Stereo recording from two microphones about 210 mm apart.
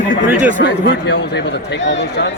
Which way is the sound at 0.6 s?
50° left (ahead or behind).